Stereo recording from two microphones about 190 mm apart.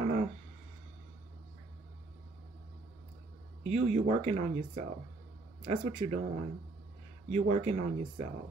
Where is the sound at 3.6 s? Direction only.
35° right (ahead or behind).